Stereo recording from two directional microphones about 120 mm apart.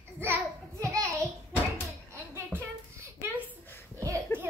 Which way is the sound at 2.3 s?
20° right (ahead or behind).